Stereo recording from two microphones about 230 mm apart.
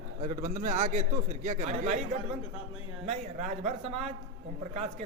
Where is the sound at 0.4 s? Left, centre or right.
Right.